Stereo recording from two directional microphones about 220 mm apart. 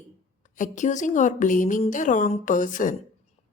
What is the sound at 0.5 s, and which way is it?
A woman's voice, 35° left (ahead or behind).